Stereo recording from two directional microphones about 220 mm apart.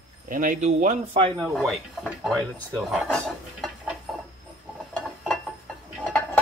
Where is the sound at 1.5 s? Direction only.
Centre (ahead or behind).